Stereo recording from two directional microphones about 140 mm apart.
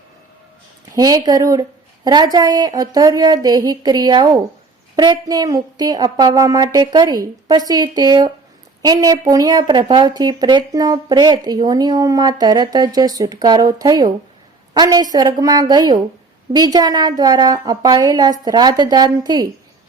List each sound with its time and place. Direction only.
0.9 s speech: 25° right (ahead or behind)